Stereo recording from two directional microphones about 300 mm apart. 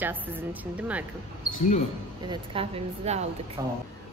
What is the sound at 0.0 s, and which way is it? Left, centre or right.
A woman's voice, centre.